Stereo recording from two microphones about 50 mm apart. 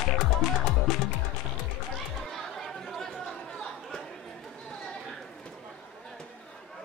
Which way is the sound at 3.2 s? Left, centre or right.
Centre.